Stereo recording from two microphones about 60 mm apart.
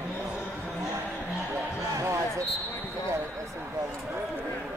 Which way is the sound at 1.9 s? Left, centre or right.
Right.